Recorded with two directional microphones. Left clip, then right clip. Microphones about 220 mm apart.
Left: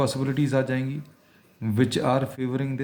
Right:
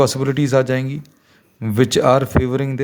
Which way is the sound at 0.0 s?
45° right (ahead or behind).